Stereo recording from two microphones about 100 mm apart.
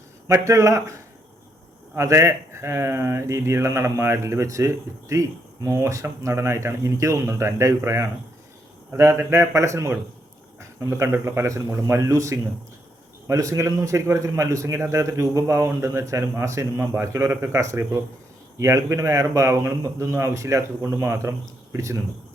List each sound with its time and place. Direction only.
0.4 s a man's voice: 30° right (ahead or behind)
2.0 s a man's voice: 30° right (ahead or behind)